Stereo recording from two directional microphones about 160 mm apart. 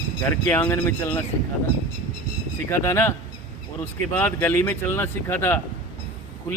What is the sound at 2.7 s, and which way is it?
Speech, 15° left (ahead or behind).